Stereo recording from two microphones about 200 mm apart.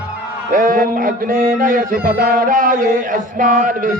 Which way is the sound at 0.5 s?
45° right (ahead or behind).